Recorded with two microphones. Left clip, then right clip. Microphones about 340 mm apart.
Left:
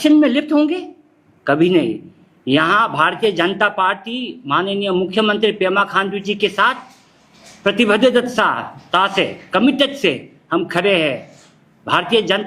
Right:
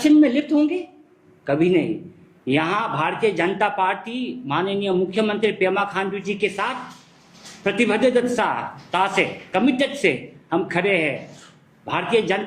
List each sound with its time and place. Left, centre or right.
0.0 s speech: left